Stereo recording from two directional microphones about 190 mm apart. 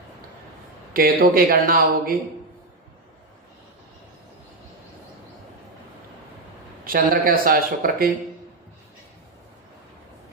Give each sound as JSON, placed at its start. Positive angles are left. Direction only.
{"t": 0.9, "sound": "speech", "side_deg": -50}
{"t": 6.8, "sound": "speech", "side_deg": -50}